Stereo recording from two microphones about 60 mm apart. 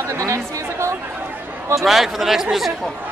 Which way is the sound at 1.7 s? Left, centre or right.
Centre.